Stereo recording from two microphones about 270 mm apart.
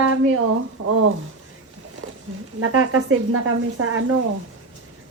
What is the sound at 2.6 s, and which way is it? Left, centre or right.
A woman's voice, right.